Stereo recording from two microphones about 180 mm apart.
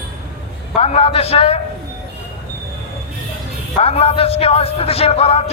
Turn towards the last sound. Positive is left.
turn(degrees=35)  # may be behind; listen again after turning